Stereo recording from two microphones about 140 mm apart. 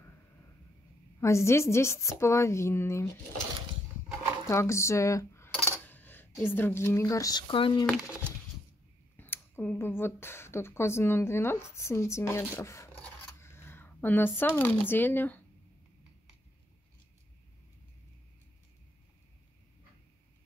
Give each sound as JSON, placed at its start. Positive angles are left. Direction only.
{"t": 1.2, "sound": "a woman's voice", "side_deg": 20}
{"t": 4.5, "sound": "speech", "side_deg": 20}
{"t": 9.1, "sound": "speech", "side_deg": 15}